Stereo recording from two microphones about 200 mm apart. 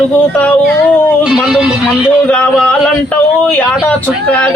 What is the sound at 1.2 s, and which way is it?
Music, 5° right (ahead or behind).